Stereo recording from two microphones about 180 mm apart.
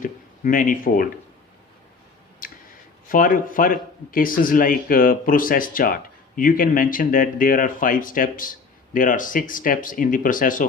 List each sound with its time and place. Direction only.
0.0 s speech: 50° left (ahead or behind)
3.1 s speech: 50° left (ahead or behind)